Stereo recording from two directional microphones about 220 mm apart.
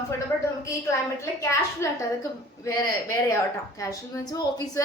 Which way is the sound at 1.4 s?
15° left (ahead or behind).